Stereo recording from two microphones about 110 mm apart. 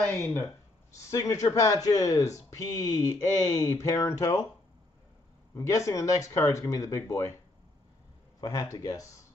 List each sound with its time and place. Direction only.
0.9 s speech: 30° left (ahead or behind)
5.5 s speech: 25° left (ahead or behind)
8.4 s speech: 35° left (ahead or behind)